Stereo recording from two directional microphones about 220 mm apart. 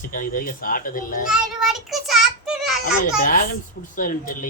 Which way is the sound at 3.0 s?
40° left (ahead or behind).